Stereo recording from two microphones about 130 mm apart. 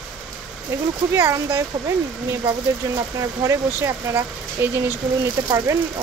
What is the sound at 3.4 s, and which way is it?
Speech, 20° right (ahead or behind).